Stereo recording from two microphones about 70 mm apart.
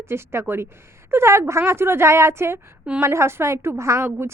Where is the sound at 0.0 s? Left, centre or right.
Right.